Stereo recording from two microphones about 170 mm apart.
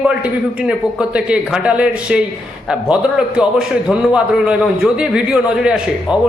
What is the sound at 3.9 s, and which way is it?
A man's voice, 5° right (ahead or behind).